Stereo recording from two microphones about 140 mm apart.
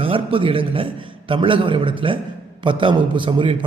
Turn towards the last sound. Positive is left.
turn(degrees=-35)  # may be behind; listen again after turning